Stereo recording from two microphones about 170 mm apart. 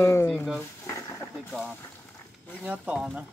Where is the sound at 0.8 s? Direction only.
15° left (ahead or behind).